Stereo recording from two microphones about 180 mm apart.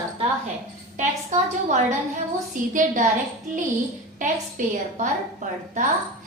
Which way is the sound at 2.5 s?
45° right (ahead or behind).